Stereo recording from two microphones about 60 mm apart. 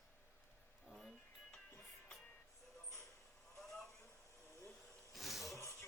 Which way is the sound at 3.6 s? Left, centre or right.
Centre.